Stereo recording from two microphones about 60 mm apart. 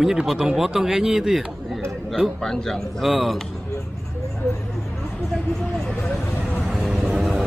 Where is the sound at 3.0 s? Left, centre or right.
Centre.